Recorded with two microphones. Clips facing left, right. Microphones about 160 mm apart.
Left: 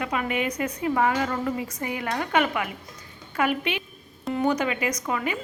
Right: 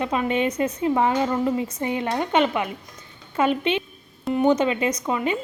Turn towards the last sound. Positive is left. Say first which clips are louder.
# right 4 dB
turn(degrees=-25)  # may be behind; listen again after turning